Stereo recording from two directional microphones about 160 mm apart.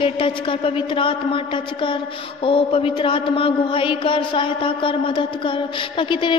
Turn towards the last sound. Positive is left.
turn(degrees=30)  # may be behind; listen again after turning